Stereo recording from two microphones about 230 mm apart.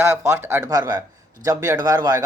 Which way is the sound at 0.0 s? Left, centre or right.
Centre.